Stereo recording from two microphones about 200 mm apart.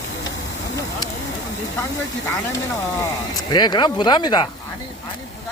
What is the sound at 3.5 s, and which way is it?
Speech, 20° left (ahead or behind).